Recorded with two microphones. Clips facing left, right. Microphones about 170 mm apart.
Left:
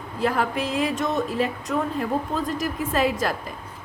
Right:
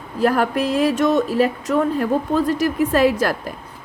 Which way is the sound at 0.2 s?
70° right (ahead or behind).